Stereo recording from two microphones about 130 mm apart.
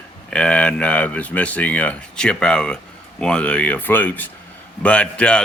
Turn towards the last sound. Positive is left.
turn(degrees=10)  # may be behind; listen again after turning